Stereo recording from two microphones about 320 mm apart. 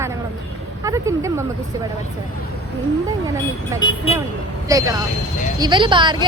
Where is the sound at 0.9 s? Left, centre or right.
Centre.